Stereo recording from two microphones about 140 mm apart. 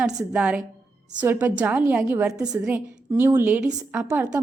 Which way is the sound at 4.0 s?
20° right (ahead or behind).